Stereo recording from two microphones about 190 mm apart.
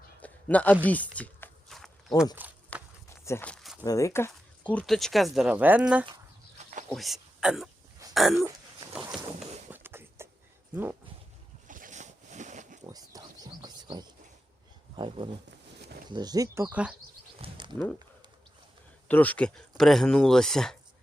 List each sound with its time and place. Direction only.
0.2 s a sound: 10° left (ahead or behind)
0.9 s walk: 10° left (ahead or behind)
2.3 s speech: 10° right (ahead or behind)
3.2 s walk: 10° left (ahead or behind)
3.8 s speech: 15° left (ahead or behind)
4.7 s speech: 5° left (ahead or behind)
8.1 s throat clearing: centre (ahead or behind)
9.6 s a sound: 10° right (ahead or behind)
11.7 s a sound: 40° right (ahead or behind)
12.8 s wild animals: 20° right (ahead or behind)
14.9 s speech: 25° right (ahead or behind)
17.4 s a sound: 25° right (ahead or behind)
19.0 s speech: 10° left (ahead or behind)